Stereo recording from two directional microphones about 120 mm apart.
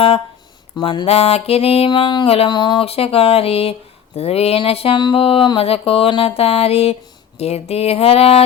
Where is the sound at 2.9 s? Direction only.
55° left (ahead or behind).